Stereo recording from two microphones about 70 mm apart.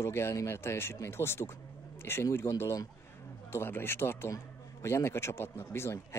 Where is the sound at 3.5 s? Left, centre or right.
Left.